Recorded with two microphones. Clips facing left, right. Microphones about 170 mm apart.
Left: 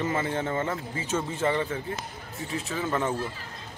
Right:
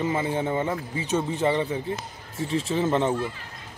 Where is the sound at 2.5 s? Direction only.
30° right (ahead or behind).